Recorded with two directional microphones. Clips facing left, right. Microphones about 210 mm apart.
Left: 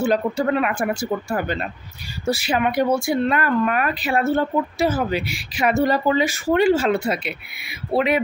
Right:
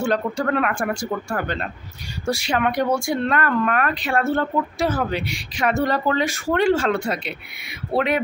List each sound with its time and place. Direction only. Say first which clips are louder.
0.0 s speech: left 2 dB; 5° left (ahead or behind)